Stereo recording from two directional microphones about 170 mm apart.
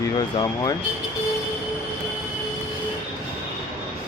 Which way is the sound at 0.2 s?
20° left (ahead or behind).